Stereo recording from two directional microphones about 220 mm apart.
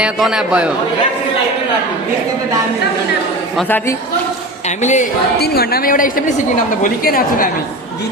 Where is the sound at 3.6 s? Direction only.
10° left (ahead or behind).